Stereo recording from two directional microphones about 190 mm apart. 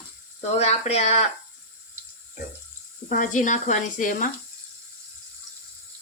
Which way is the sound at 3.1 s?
45° left (ahead or behind).